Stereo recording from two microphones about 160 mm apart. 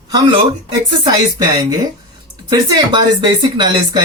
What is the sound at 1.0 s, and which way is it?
Speech, 25° right (ahead or behind).